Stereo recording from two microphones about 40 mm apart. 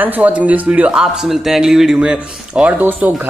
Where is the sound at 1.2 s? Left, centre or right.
Centre.